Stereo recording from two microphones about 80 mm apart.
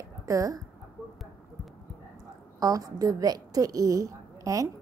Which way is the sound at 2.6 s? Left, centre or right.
Right.